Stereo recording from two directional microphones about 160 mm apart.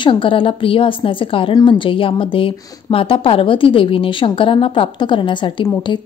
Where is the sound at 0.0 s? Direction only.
30° left (ahead or behind).